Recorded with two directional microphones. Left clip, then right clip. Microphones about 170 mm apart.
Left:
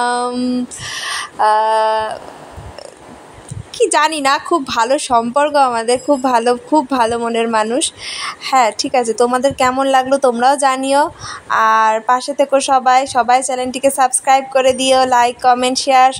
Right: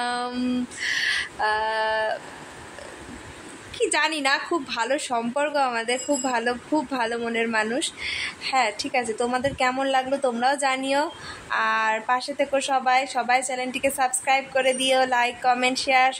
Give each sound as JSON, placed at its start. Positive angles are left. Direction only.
{"t": 0.0, "sound": "a sound", "side_deg": 35}
{"t": 0.3, "sound": "a woman's voice", "side_deg": 25}
{"t": 3.7, "sound": "a woman's voice", "side_deg": 40}